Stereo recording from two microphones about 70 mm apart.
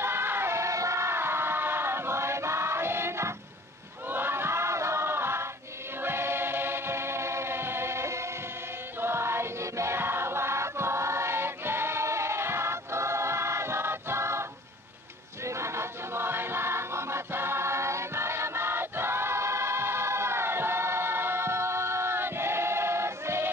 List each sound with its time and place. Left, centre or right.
0.0 s a sound: right
4.1 s choir: right
15.4 s music: right